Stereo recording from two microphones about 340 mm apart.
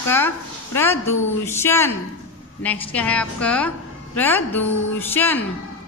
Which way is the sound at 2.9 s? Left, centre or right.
Centre.